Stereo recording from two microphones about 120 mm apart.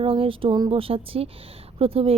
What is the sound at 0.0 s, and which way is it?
A woman's voice, 50° right (ahead or behind).